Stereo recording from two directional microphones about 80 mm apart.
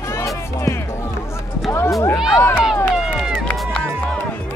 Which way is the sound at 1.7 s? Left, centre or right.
Left.